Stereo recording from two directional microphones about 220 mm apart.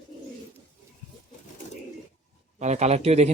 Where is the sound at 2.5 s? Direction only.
30° right (ahead or behind).